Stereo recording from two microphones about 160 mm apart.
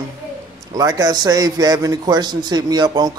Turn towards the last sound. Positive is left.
turn(degrees=-25)  # may be behind; listen again after turning